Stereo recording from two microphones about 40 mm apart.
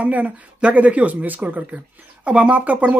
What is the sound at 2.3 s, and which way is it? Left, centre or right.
Speech, right.